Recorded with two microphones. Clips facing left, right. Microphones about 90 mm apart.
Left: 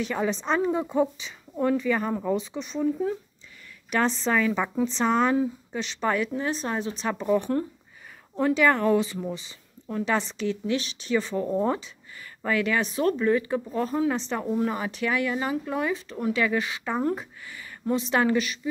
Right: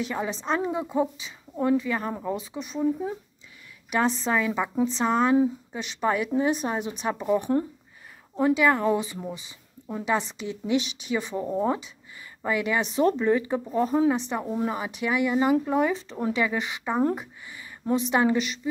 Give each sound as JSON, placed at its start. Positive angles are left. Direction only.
{"t": 0.0, "sound": "speech", "side_deg": -5}